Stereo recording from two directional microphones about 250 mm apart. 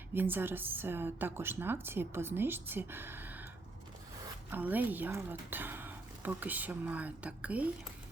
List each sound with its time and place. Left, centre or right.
0.1 s a woman's voice: centre
4.5 s a woman's voice: centre